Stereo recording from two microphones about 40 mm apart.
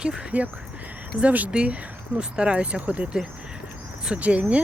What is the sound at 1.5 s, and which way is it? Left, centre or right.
Speech, right.